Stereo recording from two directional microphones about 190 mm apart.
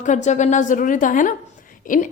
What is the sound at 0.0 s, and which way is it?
A woman's voice, 40° left (ahead or behind).